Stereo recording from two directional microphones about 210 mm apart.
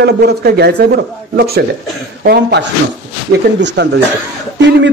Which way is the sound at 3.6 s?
55° right (ahead or behind).